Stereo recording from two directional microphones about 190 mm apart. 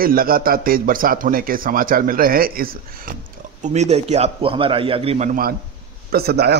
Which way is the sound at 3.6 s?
35° right (ahead or behind).